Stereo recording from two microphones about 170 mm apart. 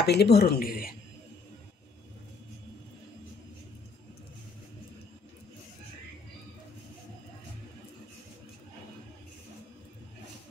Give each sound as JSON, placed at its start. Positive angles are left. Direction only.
{"t": 0.0, "sound": "speech", "side_deg": 75}